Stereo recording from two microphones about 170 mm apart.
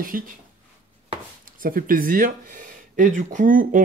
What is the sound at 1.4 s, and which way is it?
Speech, 55° right (ahead or behind).